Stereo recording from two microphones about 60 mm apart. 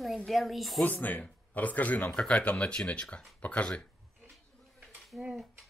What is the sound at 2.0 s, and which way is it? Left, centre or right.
Speech, centre.